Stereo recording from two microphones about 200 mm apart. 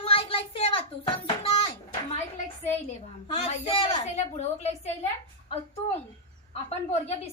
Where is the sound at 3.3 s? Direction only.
30° left (ahead or behind).